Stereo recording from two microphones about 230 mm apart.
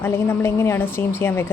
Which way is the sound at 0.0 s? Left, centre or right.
Centre.